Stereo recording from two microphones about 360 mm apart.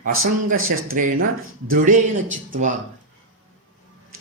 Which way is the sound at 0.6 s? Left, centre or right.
Right.